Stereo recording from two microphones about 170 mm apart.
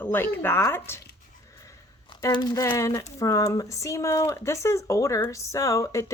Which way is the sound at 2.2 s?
25° left (ahead or behind).